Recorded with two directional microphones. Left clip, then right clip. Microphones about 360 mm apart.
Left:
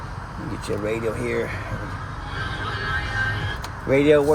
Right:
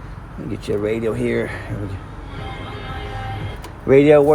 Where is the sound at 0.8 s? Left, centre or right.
Right.